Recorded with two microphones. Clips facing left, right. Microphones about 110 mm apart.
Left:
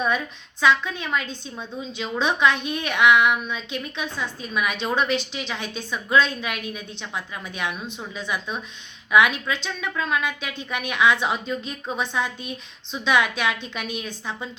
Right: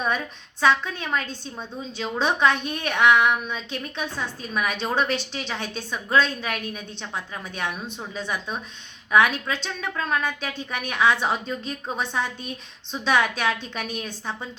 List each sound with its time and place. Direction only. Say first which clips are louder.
0.6 s a woman's voice: left 1 dB; 45° right (ahead or behind)